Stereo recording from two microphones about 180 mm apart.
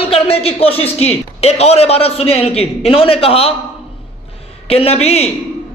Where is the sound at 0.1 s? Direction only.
30° left (ahead or behind).